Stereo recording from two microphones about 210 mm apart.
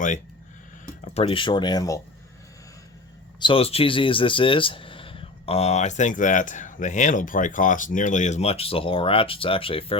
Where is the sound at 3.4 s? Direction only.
25° left (ahead or behind).